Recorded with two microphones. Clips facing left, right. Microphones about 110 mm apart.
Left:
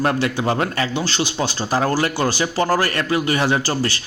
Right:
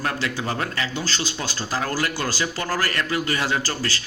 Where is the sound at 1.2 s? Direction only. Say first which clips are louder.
Left 7 dB; 20° left (ahead or behind).